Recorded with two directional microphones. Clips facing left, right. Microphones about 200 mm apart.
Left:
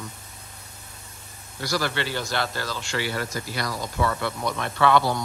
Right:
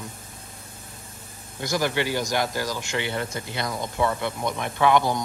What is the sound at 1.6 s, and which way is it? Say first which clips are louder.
Speech: right 2 dB; 20° right (ahead or behind).